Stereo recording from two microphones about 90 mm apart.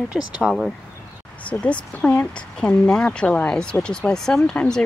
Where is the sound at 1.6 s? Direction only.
15° left (ahead or behind).